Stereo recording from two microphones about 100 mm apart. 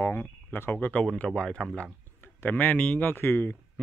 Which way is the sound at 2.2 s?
20° left (ahead or behind).